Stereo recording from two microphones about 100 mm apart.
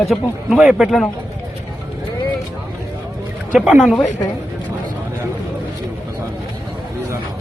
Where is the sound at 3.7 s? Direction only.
Centre (ahead or behind).